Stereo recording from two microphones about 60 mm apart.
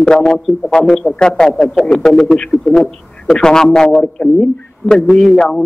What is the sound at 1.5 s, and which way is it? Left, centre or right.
Speech, centre.